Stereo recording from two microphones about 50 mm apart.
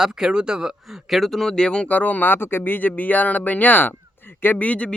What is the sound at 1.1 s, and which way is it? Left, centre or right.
Speech, centre.